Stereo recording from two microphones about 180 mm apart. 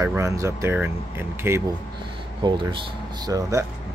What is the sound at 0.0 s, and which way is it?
Speech, 15° right (ahead or behind).